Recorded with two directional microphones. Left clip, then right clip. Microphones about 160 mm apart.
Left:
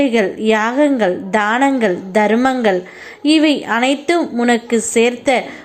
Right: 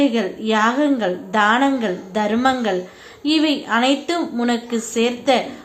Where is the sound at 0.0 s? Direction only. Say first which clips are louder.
Left 5 dB; 30° left (ahead or behind).